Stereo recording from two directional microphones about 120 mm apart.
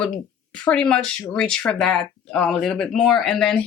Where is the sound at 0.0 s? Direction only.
10° left (ahead or behind).